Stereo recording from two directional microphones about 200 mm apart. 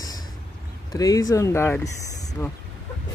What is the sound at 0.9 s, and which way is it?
Speech, 20° left (ahead or behind).